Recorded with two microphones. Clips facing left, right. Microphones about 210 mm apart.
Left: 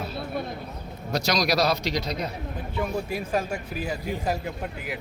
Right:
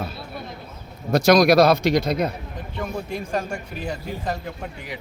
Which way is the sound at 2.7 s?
5° left (ahead or behind).